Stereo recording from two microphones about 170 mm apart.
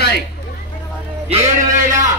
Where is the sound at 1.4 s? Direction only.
20° right (ahead or behind).